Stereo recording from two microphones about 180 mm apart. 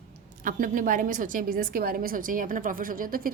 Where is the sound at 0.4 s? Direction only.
50° right (ahead or behind).